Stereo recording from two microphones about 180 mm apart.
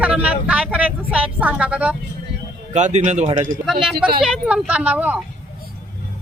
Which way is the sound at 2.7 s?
40° right (ahead or behind).